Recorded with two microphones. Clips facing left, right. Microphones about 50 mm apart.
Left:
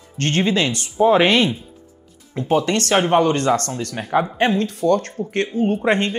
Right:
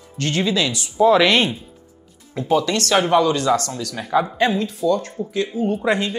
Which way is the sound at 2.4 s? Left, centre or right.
Left.